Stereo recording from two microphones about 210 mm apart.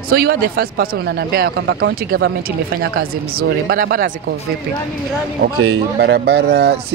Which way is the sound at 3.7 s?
45° right (ahead or behind).